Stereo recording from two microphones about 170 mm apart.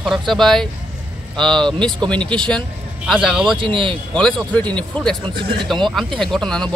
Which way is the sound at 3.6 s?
30° right (ahead or behind).